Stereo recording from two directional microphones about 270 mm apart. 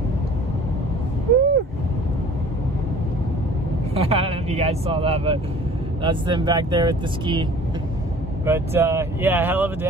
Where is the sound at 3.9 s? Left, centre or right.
Right.